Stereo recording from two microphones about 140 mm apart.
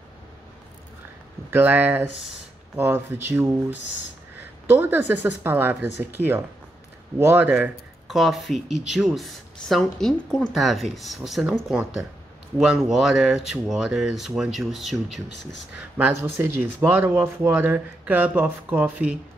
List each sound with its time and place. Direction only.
1.5 s speech: 15° right (ahead or behind)
4.6 s speech: 15° right (ahead or behind)
12.5 s speech: 5° right (ahead or behind)
16.0 s speech: 15° right (ahead or behind)